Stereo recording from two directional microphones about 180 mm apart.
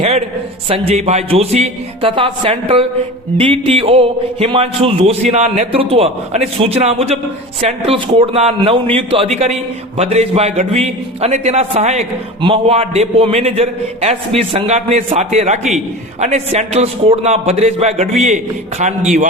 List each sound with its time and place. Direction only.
0.7 s a man's voice: 35° right (ahead or behind)